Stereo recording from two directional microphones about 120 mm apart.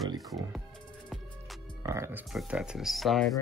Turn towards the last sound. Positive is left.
turn(degrees=0)  # may be behind; listen again after turning